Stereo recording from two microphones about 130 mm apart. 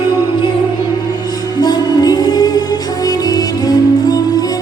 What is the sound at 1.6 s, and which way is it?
Music, 30° left (ahead or behind).